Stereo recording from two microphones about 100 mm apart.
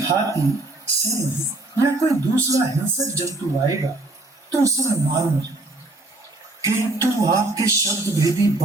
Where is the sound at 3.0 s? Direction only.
30° right (ahead or behind).